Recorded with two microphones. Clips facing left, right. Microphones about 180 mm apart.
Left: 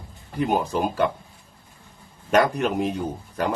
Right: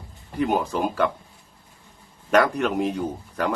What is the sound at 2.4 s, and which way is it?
Speech, 20° left (ahead or behind).